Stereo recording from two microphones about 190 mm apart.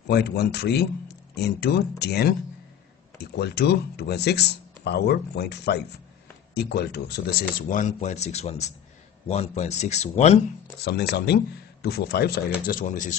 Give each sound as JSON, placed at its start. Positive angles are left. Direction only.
{"t": 0.1, "sound": "speech", "side_deg": 60}
{"t": 10.8, "sound": "speech", "side_deg": 60}
{"t": 12.6, "sound": "speech", "side_deg": 45}